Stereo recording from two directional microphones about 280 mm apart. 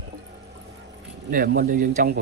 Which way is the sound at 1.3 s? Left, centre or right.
Right.